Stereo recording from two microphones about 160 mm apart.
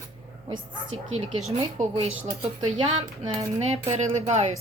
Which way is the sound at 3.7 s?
45° right (ahead or behind).